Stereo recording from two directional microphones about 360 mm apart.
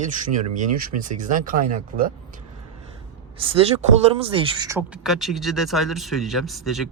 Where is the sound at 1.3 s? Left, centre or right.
Right.